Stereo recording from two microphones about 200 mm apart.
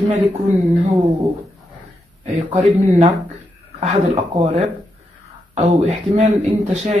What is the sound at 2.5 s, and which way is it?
Speech, 35° right (ahead or behind).